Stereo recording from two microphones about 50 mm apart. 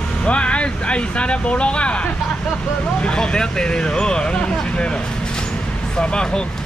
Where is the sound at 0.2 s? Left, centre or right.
Left.